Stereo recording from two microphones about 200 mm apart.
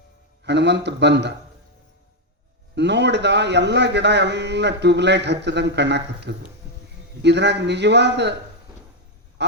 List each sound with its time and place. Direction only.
0.4 s a man's voice: 60° right (ahead or behind)
2.7 s a man's voice: 60° right (ahead or behind)